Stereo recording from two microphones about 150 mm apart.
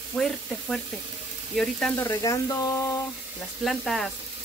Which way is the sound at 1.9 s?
20° left (ahead or behind).